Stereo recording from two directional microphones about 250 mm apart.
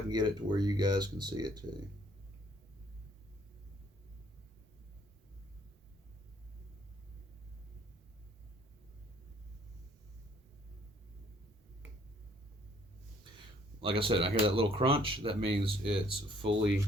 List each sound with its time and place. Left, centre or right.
0.1 s speech: centre
13.8 s speech: right